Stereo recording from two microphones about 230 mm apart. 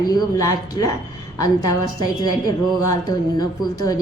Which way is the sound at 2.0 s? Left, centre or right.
Centre.